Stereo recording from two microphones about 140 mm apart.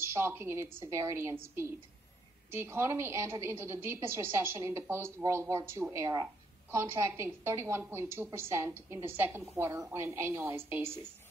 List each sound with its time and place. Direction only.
0.0 s a woman's voice: 15° right (ahead or behind)